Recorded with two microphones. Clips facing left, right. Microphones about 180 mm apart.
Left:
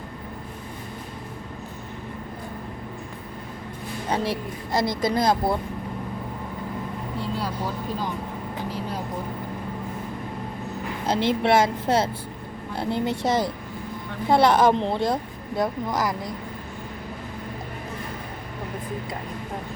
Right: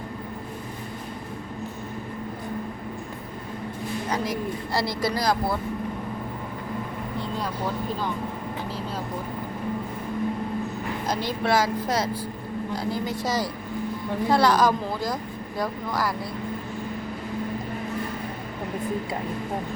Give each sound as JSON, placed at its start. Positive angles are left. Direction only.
{"t": 4.1, "sound": "speech", "side_deg": 30}
{"t": 4.7, "sound": "speech", "side_deg": 20}
{"t": 11.0, "sound": "speech", "side_deg": 25}